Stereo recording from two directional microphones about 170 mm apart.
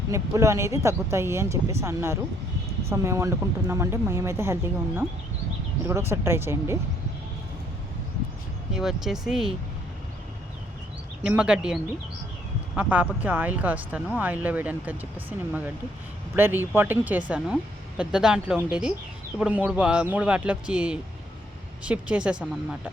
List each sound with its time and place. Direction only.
0.1 s speech: 15° right (ahead or behind)
8.7 s a woman's voice: 5° right (ahead or behind)
11.2 s a woman's voice: 5° right (ahead or behind)